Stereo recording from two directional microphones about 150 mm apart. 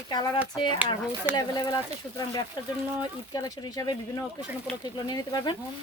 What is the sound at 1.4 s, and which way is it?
Speech, 25° left (ahead or behind).